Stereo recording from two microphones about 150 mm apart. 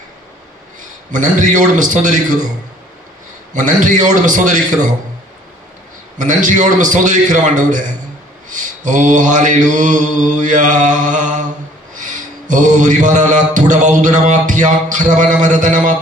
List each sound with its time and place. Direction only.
0.8 s mantra: 55° right (ahead or behind)
3.5 s mantra: 60° right (ahead or behind)
6.1 s mantra: 55° right (ahead or behind)